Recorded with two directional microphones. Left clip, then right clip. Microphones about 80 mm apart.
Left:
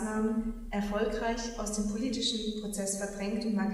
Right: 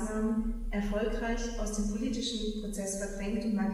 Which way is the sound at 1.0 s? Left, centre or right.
Left.